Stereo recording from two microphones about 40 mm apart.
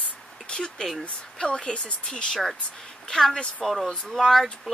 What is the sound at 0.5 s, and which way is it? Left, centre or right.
Speech, left.